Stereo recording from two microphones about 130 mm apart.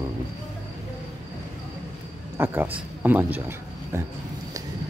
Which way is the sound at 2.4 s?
15° right (ahead or behind).